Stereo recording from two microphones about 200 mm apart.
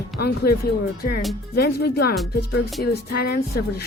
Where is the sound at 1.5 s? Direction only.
50° left (ahead or behind).